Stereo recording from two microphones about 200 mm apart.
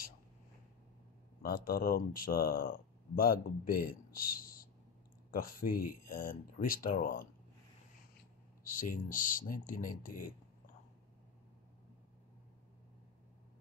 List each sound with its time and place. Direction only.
1.4 s speech: 50° left (ahead or behind)
8.6 s speech: 40° left (ahead or behind)